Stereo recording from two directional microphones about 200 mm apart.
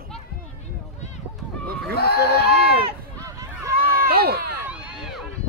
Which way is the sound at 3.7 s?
50° right (ahead or behind).